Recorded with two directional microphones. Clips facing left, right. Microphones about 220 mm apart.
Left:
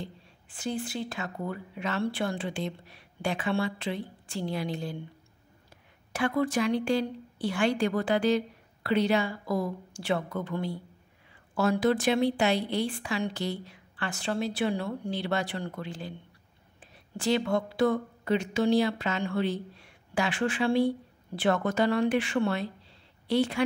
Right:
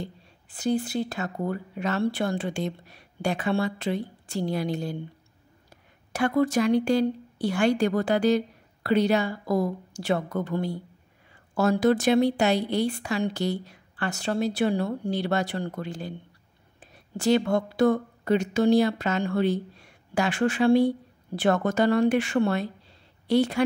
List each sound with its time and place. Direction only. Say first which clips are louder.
0.5 s a woman's voice: right 7 dB; 40° right (ahead or behind)
6.1 s a woman's voice: right 4 dB; 40° right (ahead or behind)